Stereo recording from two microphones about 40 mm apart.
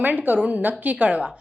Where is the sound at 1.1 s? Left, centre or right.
Right.